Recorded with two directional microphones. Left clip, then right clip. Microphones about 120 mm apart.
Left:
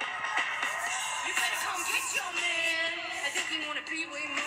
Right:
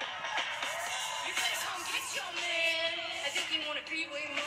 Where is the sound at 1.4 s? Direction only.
30° left (ahead or behind).